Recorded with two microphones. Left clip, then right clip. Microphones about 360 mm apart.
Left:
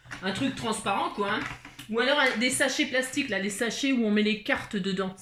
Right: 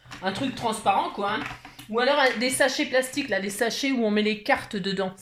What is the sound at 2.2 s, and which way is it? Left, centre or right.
Speech, centre.